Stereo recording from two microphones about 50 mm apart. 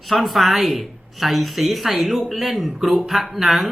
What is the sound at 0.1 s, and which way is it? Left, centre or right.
Speech, centre.